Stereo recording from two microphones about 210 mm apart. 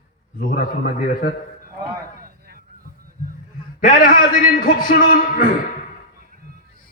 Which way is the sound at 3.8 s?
40° left (ahead or behind).